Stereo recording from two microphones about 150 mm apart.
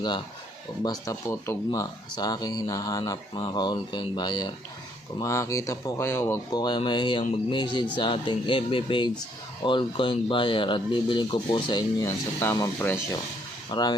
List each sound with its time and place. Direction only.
0.8 s speech: 25° left (ahead or behind)
6.5 s speech: 30° left (ahead or behind)